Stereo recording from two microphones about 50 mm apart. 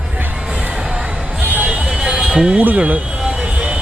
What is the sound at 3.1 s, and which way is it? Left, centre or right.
Vehicle, centre.